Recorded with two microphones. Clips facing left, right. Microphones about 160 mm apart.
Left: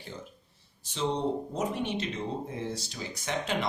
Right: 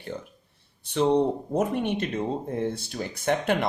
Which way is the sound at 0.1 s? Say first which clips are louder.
Right 6 dB; 60° right (ahead or behind).